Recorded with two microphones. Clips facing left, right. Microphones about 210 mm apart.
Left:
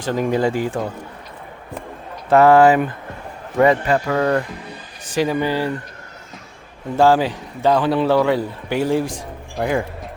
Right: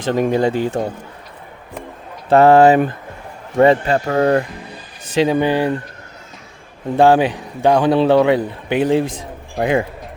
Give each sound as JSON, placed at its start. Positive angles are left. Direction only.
{"t": 0.0, "sound": "speech", "side_deg": -25}
{"t": 2.3, "sound": "speech", "side_deg": -25}
{"t": 5.1, "sound": "speech", "side_deg": -25}
{"t": 6.9, "sound": "a man's voice", "side_deg": -20}